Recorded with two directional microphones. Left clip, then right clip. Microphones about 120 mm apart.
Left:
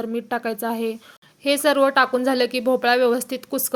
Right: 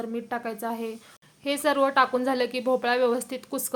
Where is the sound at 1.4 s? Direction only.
30° left (ahead or behind).